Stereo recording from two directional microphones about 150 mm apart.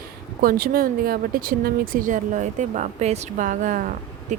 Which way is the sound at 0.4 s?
75° right (ahead or behind).